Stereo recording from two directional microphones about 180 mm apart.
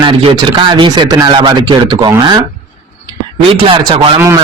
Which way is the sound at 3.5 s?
30° right (ahead or behind).